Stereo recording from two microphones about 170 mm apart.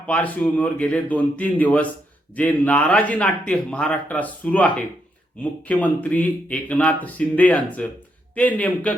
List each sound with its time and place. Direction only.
0.0 s speech: 10° left (ahead or behind)